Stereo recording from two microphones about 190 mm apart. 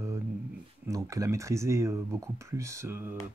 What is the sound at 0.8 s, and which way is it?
Speech, 15° right (ahead or behind).